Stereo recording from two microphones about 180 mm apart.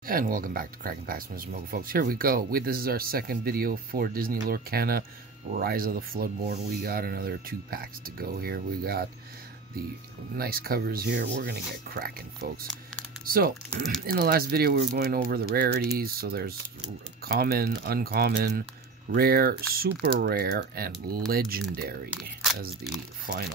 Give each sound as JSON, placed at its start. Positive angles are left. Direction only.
{"t": 0.0, "sound": "speech", "side_deg": -50}
{"t": 10.3, "sound": "speech", "side_deg": -55}